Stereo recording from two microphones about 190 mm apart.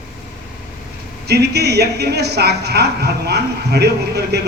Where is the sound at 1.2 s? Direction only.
60° right (ahead or behind).